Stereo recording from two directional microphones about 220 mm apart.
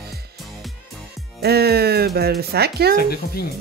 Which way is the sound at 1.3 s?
45° right (ahead or behind).